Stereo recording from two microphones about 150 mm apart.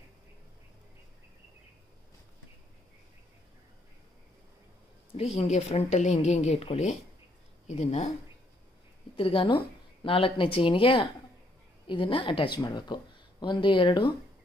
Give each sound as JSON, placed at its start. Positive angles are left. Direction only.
{"t": 5.1, "sound": "a woman's voice", "side_deg": 45}
{"t": 9.1, "sound": "speech", "side_deg": 35}